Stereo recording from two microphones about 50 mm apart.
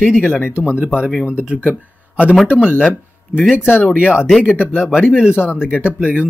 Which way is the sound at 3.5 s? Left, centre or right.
Left.